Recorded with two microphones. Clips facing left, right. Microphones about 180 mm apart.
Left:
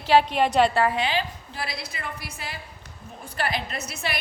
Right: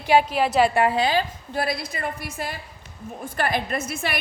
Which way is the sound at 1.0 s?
45° right (ahead or behind).